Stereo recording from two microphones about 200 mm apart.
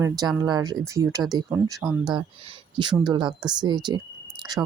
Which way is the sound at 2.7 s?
20° right (ahead or behind).